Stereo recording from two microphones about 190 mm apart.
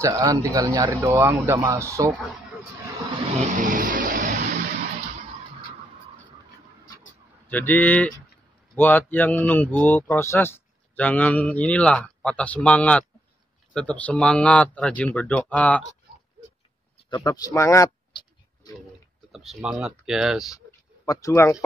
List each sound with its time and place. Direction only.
0.0 s speech: 20° right (ahead or behind)
3.5 s vehicle: 45° right (ahead or behind)
7.4 s speech: 10° left (ahead or behind)
17.1 s speech: 20° left (ahead or behind)
19.3 s speech: centre (ahead or behind)
20.5 s a sound: 15° left (ahead or behind)